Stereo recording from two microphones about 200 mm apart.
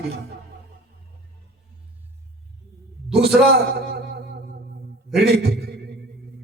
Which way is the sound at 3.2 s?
55° right (ahead or behind).